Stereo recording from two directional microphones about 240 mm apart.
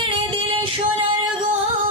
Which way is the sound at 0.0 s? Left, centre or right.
Right.